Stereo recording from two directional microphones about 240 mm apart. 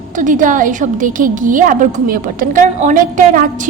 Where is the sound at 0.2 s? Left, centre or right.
Right.